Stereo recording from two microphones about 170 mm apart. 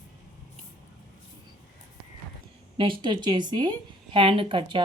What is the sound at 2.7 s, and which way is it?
A woman's voice, 30° right (ahead or behind).